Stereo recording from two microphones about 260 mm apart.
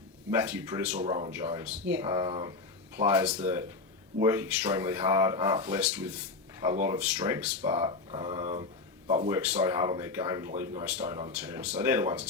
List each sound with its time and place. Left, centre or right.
0.3 s speech: centre
0.9 s speech: right
1.5 s speech: centre